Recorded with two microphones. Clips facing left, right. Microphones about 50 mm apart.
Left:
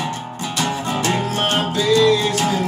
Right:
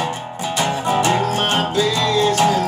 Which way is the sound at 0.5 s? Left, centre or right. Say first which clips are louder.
Right 4 dB; centre.